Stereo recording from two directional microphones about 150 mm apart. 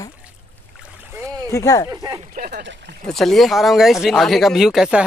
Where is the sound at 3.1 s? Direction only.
Centre (ahead or behind).